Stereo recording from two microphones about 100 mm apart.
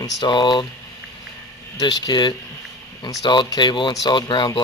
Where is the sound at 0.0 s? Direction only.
50° left (ahead or behind).